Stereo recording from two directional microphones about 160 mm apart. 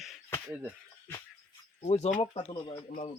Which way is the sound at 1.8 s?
45° left (ahead or behind).